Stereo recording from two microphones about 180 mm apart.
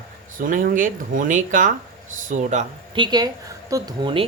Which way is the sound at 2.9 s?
25° right (ahead or behind).